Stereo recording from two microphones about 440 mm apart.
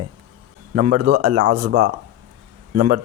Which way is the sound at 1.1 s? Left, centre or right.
Right.